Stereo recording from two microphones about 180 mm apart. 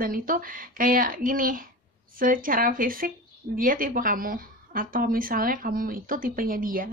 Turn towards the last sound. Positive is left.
turn(degrees=-50)  # may be behind; listen again after turning